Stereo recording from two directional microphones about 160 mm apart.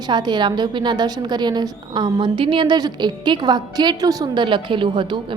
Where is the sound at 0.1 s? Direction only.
25° right (ahead or behind).